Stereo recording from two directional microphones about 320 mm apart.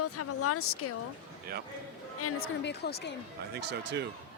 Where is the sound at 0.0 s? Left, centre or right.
Left.